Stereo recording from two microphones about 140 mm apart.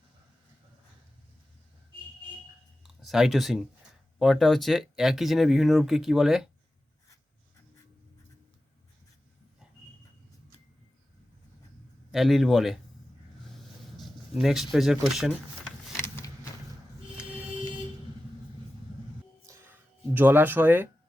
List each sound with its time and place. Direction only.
2.8 s speech: centre (ahead or behind)
12.1 s speech: centre (ahead or behind)
13.9 s speech: centre (ahead or behind)
16.0 s vehicle: 20° left (ahead or behind)
19.5 s a sound: 15° right (ahead or behind)